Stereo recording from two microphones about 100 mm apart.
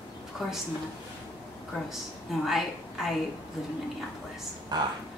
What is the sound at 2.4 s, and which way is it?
Speech, centre (ahead or behind).